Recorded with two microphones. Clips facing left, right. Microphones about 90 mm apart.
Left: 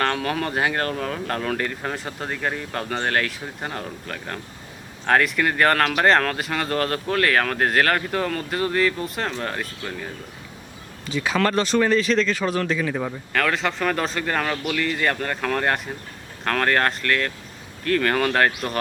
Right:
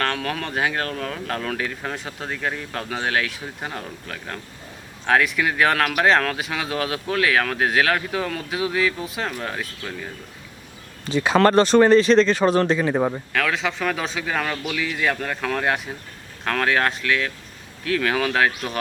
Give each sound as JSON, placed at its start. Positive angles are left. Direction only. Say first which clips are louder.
{"t": 0.0, "sound": "speech", "louder": "left 2 dB", "side_deg": 5}
{"t": 11.1, "sound": "speech", "louder": "right 5 dB", "side_deg": -35}
{"t": 13.3, "sound": "speech", "louder": "left 1 dB", "side_deg": 0}